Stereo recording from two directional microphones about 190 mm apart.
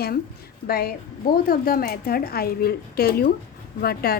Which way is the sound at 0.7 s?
50° left (ahead or behind).